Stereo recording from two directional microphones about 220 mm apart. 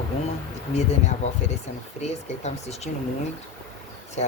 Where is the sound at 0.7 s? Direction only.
30° left (ahead or behind).